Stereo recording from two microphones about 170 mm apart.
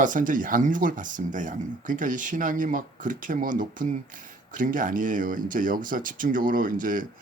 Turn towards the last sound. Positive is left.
turn(degrees=-55)  # may be behind; listen again after turning